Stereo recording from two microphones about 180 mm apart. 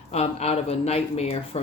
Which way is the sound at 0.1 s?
35° left (ahead or behind).